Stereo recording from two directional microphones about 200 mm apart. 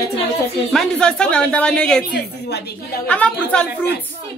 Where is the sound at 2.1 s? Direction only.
55° left (ahead or behind).